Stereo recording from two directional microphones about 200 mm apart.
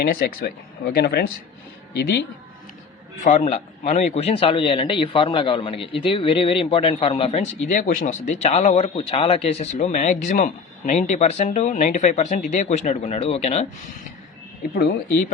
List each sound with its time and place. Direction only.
0.0 s speech: 50° left (ahead or behind)
3.2 s a man's voice: 35° left (ahead or behind)
14.8 s speech: 45° left (ahead or behind)